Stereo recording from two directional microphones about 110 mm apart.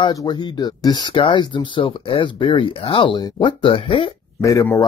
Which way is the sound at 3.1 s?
40° left (ahead or behind).